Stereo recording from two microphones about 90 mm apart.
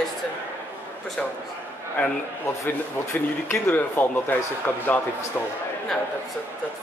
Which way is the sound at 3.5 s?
20° left (ahead or behind).